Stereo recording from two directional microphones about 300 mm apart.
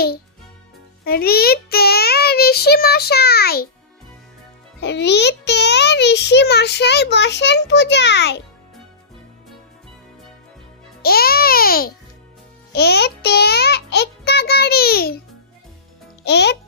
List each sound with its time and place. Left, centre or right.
1.0 s a child's voice: left
4.8 s a child's voice: left
11.0 s a child's voice: left
16.2 s a child's voice: left